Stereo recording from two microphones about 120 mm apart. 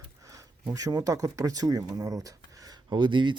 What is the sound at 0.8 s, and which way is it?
Speech, 30° right (ahead or behind).